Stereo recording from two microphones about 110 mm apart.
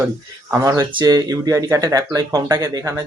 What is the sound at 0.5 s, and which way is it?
Speech, 30° right (ahead or behind).